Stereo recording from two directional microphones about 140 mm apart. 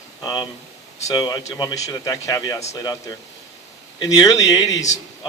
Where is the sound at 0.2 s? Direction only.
30° left (ahead or behind).